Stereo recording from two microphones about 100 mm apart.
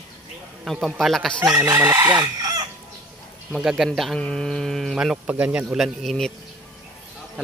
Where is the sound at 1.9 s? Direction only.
35° right (ahead or behind).